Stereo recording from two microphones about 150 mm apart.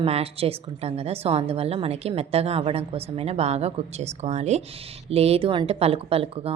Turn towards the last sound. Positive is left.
turn(degrees=-40)  # may be behind; listen again after turning